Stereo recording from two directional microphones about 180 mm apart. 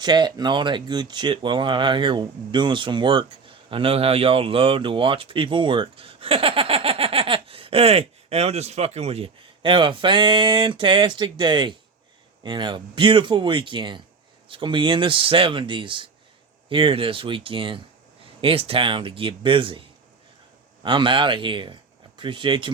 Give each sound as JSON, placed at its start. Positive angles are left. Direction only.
{"t": 0.0, "sound": "speech", "side_deg": -25}
{"t": 20.8, "sound": "speech", "side_deg": -25}